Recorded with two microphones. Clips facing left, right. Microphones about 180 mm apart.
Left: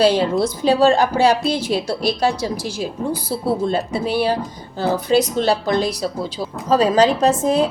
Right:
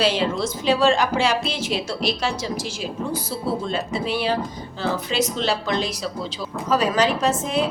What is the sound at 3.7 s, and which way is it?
A woman's voice, 35° left (ahead or behind).